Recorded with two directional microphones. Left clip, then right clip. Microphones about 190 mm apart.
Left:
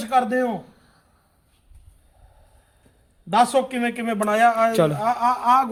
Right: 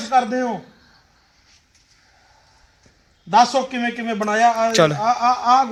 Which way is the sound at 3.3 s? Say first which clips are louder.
Right 3 dB; 15° left (ahead or behind).